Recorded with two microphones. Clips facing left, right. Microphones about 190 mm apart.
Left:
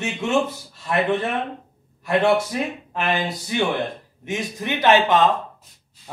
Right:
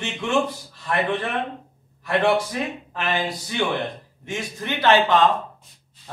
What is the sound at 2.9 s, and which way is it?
A man's voice, 20° left (ahead or behind).